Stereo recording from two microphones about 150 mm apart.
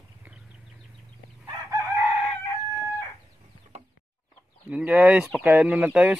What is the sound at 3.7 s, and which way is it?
Chicken, 50° right (ahead or behind).